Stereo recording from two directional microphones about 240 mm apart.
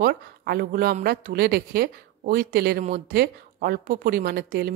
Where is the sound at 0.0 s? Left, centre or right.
Right.